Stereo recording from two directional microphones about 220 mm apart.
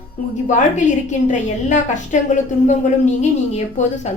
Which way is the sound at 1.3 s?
35° left (ahead or behind).